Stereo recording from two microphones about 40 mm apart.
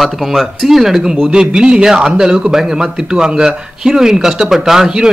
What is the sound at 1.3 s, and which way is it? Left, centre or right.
A man's voice, right.